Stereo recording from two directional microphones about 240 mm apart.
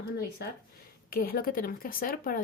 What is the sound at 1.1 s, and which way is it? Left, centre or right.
A woman's voice, left.